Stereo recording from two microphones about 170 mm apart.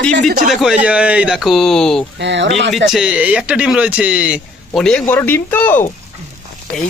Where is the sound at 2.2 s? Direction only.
90° right.